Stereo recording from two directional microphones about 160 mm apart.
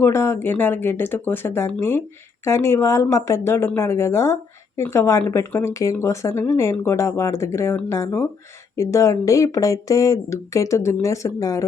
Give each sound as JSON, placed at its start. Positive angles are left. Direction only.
{"t": 0.0, "sound": "speech", "side_deg": 15}